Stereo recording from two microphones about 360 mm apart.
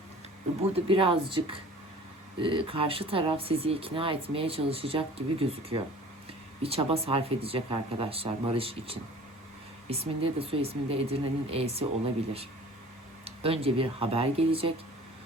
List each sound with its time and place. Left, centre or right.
0.9 s speech: centre
13.2 s speech: centre